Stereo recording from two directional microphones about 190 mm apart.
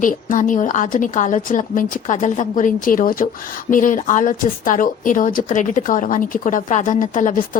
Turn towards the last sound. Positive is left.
turn(degrees=40)  # may be behind; listen again after turning